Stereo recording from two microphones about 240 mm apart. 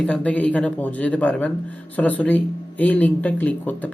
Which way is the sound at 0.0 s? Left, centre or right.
Centre.